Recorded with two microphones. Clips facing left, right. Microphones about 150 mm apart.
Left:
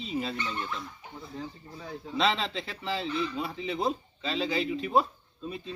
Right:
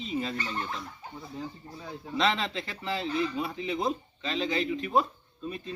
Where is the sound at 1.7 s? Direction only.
40° right (ahead or behind).